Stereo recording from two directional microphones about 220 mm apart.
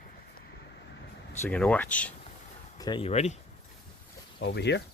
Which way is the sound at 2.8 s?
20° left (ahead or behind).